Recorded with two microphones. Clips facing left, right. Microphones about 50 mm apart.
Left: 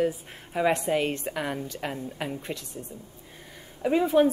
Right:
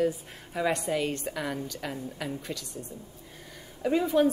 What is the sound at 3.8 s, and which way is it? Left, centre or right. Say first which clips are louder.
Speech: left 3 dB; centre.